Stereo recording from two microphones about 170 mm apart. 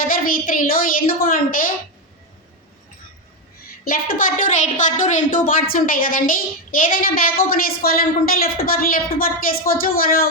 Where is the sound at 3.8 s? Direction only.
55° left (ahead or behind).